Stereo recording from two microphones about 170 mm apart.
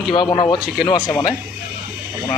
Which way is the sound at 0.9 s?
25° left (ahead or behind).